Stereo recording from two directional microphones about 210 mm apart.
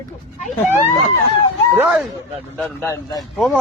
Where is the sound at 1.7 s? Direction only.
10° right (ahead or behind).